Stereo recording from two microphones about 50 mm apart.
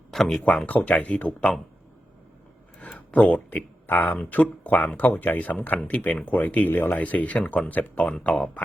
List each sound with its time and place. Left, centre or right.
0.1 s speech: centre
0.6 s speech: left
2.8 s speech: left
6.7 s speech: left
6.9 s speech: left